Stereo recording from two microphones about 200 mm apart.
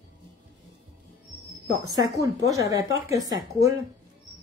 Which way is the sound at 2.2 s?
15° right (ahead or behind).